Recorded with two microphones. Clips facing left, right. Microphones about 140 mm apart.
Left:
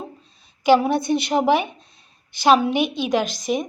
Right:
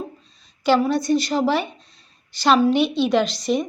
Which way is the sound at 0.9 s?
60° left (ahead or behind).